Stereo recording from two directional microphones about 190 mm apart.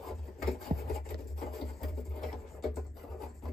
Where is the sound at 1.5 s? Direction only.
Centre (ahead or behind).